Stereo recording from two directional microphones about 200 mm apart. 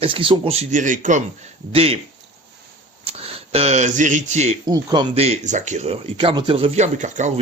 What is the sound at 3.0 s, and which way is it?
Speech, 30° right (ahead or behind).